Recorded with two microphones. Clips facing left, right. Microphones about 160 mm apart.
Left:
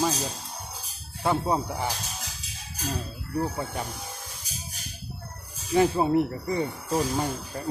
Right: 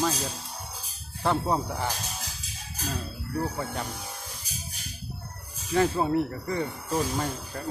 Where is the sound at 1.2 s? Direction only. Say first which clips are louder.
Left 1 dB; 5° left (ahead or behind).